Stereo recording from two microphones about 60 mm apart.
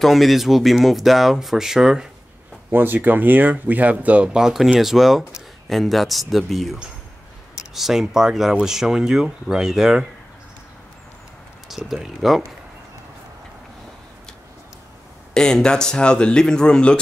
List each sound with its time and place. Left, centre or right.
0.0 s speech: centre
2.7 s speech: right; by 9.9 s centre
11.7 s speech: centre
15.3 s speech: centre